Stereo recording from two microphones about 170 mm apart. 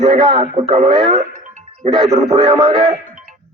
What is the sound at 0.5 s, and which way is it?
Speech, 35° right (ahead or behind).